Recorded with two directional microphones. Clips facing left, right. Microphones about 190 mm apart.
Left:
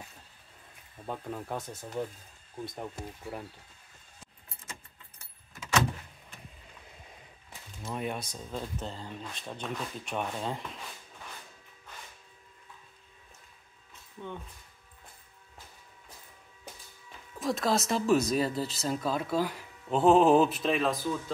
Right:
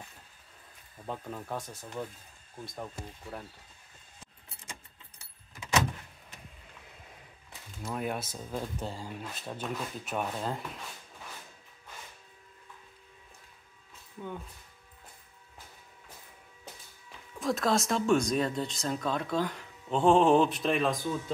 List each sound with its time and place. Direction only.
1.0 s speech: 5° left (ahead or behind)
2.8 s speech: 10° left (ahead or behind)
5.2 s vehicle: 15° right (ahead or behind)
7.8 s speech: centre (ahead or behind)
17.4 s speech: centre (ahead or behind)